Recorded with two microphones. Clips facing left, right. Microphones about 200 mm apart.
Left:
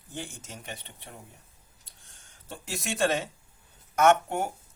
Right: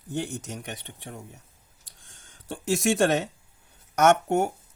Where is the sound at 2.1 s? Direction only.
90° right.